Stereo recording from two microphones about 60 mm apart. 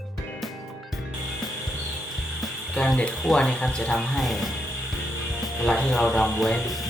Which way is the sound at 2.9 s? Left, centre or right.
Centre.